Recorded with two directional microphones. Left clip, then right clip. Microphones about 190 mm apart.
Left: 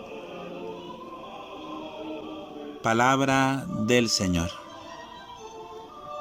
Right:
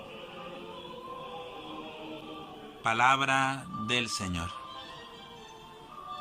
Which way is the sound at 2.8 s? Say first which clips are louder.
Left 3 dB; 40° left (ahead or behind).